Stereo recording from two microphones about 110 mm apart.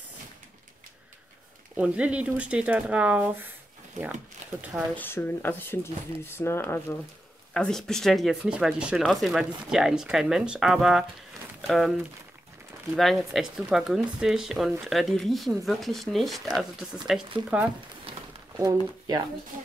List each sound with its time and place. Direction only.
1.8 s speech: 10° right (ahead or behind)
4.9 s speech: 20° left (ahead or behind)
7.5 s speech: 5° left (ahead or behind)
12.9 s speech: centre (ahead or behind)
17.5 s speech: 15° right (ahead or behind)
18.1 s a sound: 55° right (ahead or behind)
18.6 s speech: 35° right (ahead or behind)